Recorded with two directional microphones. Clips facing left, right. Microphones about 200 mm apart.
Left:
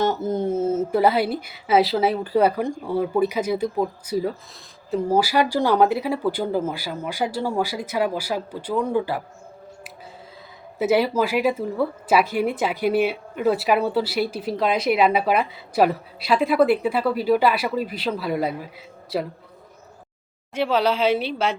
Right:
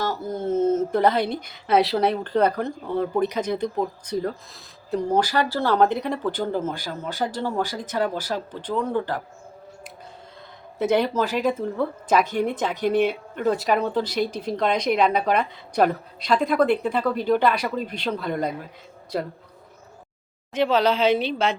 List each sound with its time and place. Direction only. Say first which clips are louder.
0.0 s a sound: left 5 dB; 20° left (ahead or behind)
0.5 s a woman's voice: right 5 dB; 10° left (ahead or behind)
10.8 s a woman's voice: left 2 dB; 5° left (ahead or behind)
20.5 s a woman's voice: right 1 dB; 10° left (ahead or behind)